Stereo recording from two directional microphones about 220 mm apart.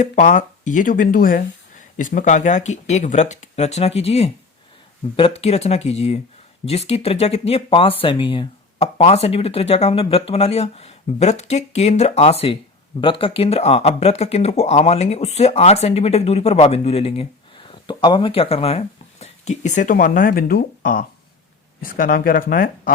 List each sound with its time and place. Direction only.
0.0 s speech: 35° left (ahead or behind)